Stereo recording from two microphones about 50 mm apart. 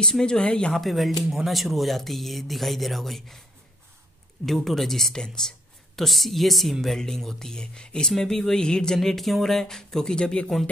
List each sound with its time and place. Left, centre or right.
0.0 s speech: centre
0.7 s speech: centre
4.5 s speech: centre
5.9 s speech: centre